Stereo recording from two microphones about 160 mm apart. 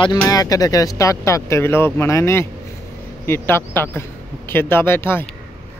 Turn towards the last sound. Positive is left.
turn(degrees=15)  # may be behind; listen again after turning